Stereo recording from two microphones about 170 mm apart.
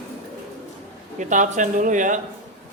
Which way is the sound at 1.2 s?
50° right (ahead or behind).